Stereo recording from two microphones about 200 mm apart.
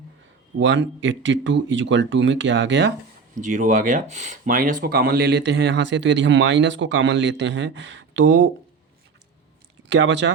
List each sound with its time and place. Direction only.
0.6 s speech: 65° right (ahead or behind)
3.4 s speech: 40° right (ahead or behind); by 8.4 s 65° right (ahead or behind)
9.9 s speech: 60° right (ahead or behind)